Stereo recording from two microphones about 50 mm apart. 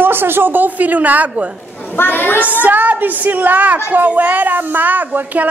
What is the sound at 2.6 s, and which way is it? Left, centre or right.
A woman's voice, right.